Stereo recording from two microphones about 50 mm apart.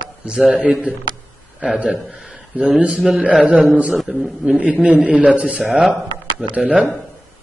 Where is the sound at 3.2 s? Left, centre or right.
Right.